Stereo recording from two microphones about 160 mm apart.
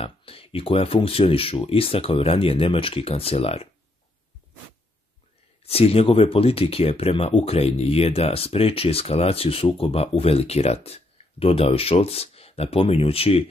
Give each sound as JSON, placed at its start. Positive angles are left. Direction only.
{"t": 0.0, "sound": "speech", "side_deg": 35}
{"t": 5.6, "sound": "speech", "side_deg": 40}